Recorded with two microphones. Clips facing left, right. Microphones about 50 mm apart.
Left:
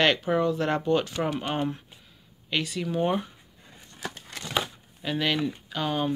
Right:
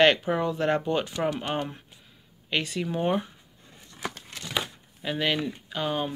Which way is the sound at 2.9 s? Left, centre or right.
Centre.